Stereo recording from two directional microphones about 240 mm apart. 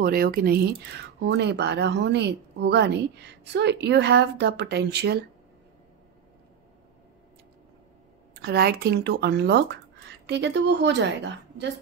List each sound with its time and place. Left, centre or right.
0.0 s speech: right
8.4 s speech: right